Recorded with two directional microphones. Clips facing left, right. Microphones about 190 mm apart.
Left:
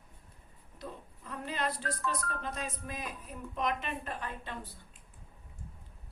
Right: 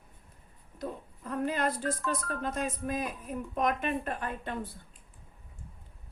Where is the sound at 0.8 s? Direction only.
50° right (ahead or behind).